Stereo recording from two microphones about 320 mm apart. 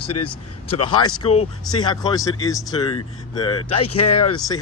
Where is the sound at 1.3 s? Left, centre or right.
Centre.